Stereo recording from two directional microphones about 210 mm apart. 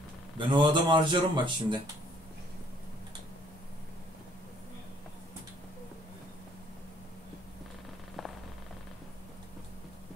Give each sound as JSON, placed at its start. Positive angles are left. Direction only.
{"t": 0.4, "sound": "speech", "side_deg": -20}